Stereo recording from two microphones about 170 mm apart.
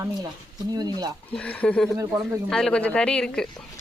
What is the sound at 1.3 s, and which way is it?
Chopping, 5° left (ahead or behind).